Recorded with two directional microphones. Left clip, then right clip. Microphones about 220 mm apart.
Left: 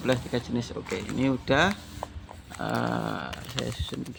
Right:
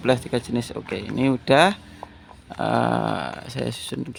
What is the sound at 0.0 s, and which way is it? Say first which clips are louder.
Speech: right 6 dB; 50° right (ahead or behind).